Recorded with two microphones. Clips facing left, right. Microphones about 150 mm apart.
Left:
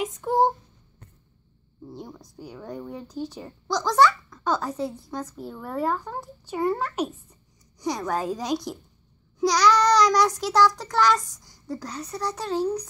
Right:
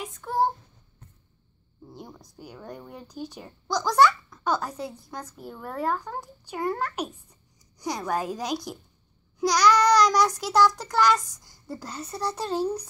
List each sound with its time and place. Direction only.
0.0 s child singing: 20° left (ahead or behind)
1.9 s speech: centre (ahead or behind)